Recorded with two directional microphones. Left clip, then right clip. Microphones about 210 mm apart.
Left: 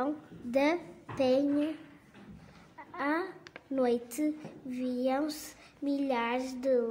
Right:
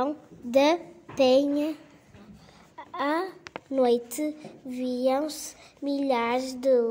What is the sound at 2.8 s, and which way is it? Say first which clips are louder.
A woman's voice: right 5 dB; 20° right (ahead or behind).